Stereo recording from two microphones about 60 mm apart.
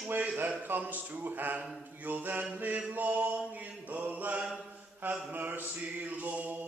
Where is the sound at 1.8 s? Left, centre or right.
Right.